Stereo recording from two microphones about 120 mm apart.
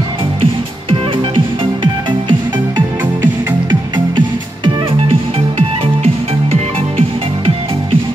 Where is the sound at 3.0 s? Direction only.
15° right (ahead or behind).